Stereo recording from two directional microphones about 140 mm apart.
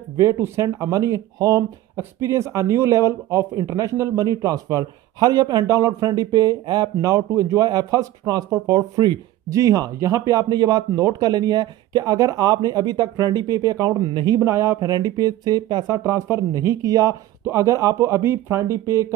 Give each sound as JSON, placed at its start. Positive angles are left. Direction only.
{"t": 0.2, "sound": "speech", "side_deg": -20}